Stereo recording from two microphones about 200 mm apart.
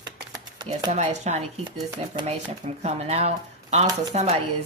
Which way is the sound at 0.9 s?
35° right (ahead or behind).